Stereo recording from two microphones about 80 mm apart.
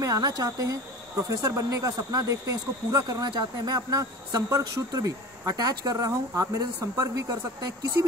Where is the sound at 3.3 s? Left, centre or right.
Right.